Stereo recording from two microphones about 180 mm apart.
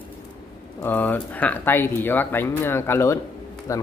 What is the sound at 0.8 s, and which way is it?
Speech, 10° left (ahead or behind).